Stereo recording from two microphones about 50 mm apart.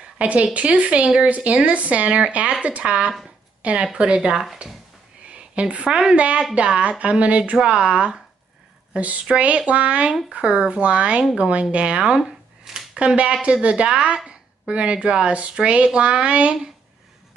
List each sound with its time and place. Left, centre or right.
0.0 s speech: right
5.3 s a sound: right
5.9 s speech: centre